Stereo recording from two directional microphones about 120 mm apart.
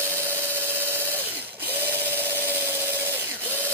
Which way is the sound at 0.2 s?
20° right (ahead or behind).